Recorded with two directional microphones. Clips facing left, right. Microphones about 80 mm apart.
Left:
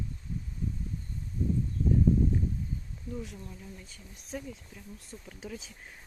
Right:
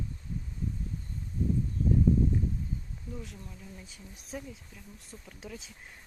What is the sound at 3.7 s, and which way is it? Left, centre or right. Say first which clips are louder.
Speech: right 1 dB; centre.